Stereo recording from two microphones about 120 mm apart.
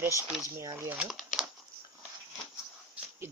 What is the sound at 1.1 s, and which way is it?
Crumpling, centre (ahead or behind).